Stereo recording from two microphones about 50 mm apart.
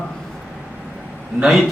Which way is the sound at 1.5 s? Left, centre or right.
Centre.